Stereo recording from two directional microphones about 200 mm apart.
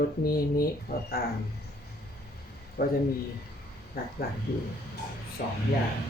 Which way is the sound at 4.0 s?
50° left (ahead or behind).